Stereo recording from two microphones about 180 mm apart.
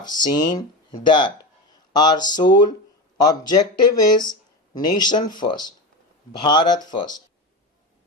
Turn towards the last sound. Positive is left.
turn(degrees=25)  # may be behind; listen again after turning